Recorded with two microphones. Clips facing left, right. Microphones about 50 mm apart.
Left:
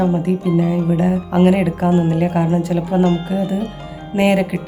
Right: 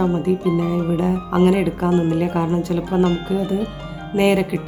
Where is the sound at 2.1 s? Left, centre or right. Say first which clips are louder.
Left 2 dB; centre.